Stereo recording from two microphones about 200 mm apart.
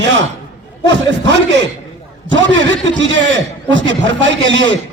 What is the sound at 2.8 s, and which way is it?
A man's voice, 65° right (ahead or behind).